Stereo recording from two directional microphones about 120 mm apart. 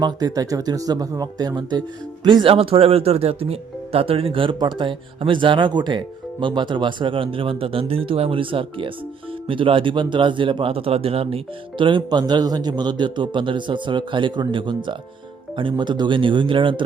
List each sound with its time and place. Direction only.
0.0 s speech: 35° right (ahead or behind)